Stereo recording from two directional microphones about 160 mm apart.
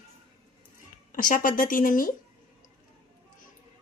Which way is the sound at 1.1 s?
60° left (ahead or behind).